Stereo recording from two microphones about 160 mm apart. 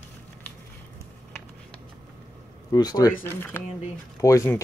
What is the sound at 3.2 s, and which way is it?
Speech, 15° left (ahead or behind).